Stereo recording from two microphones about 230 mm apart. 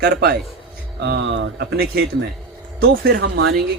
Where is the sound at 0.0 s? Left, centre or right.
Right.